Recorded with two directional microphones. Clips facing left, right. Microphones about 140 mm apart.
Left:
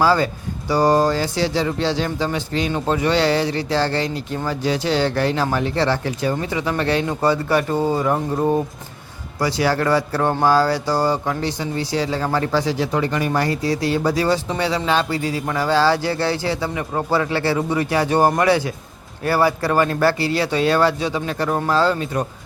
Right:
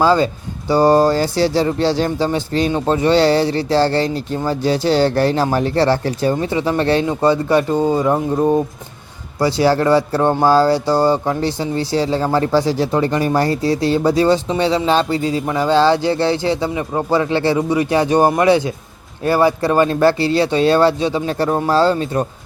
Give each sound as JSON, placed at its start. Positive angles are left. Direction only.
{"t": 0.0, "sound": "speech", "side_deg": -20}
{"t": 9.4, "sound": "speech", "side_deg": -30}